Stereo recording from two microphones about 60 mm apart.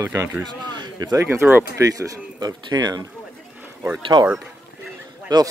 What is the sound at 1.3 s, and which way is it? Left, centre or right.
Speech, right.